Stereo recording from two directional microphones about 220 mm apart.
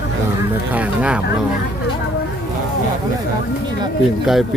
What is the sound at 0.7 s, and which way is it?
Speech, 5° right (ahead or behind).